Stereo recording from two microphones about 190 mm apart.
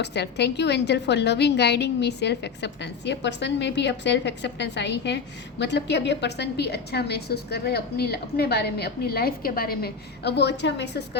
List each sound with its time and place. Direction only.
0.0 s a woman's voice: 60° left (ahead or behind)